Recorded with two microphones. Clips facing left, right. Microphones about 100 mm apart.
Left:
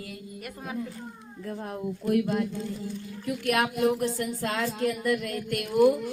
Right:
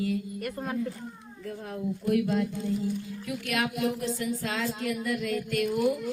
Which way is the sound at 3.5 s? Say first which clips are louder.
Left 5 dB; 55° left (ahead or behind).